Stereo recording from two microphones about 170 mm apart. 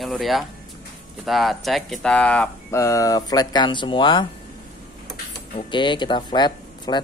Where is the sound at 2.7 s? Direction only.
20° left (ahead or behind).